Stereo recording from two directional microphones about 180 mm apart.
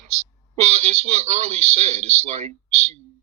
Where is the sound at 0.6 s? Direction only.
35° right (ahead or behind).